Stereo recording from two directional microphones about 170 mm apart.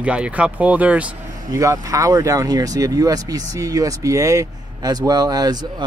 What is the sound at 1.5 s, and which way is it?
Speech, 20° right (ahead or behind).